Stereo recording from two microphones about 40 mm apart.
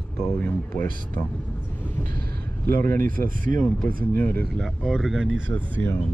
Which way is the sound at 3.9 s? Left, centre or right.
Left.